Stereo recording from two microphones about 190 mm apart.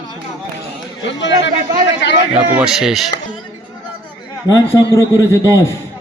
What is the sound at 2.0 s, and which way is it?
Speech, 65° left (ahead or behind).